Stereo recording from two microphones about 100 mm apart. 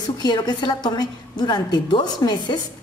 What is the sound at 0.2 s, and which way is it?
A woman's voice, 45° left (ahead or behind).